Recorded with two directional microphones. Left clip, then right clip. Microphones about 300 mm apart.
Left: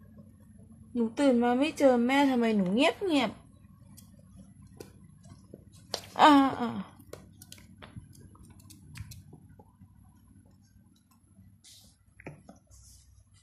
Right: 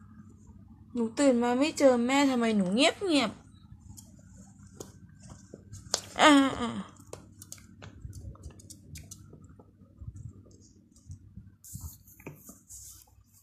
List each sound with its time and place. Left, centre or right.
0.9 s a woman's voice: centre
6.1 s gasp: centre
7.1 s chewing: centre